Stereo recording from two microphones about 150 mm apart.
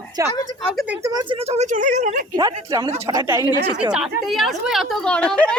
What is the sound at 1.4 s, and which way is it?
Speech, 45° right (ahead or behind).